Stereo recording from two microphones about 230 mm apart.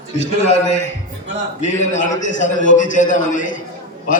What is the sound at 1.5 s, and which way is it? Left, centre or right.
A man's voice, left.